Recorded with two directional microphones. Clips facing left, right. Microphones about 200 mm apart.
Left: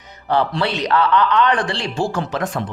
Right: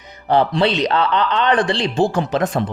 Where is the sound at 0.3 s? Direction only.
20° right (ahead or behind).